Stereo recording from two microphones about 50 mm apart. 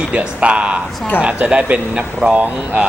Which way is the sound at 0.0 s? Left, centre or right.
Right.